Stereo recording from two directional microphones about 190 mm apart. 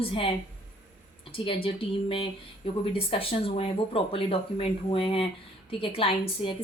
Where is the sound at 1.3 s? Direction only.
30° left (ahead or behind).